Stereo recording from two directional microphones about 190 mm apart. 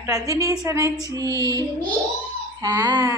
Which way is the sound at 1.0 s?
20° right (ahead or behind).